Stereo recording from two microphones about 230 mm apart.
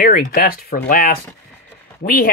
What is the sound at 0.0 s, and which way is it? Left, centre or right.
Speech, left.